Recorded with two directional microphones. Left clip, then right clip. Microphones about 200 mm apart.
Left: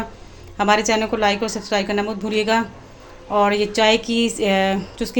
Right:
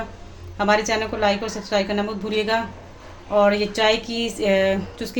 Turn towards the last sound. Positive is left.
turn(degrees=30)  # may be behind; listen again after turning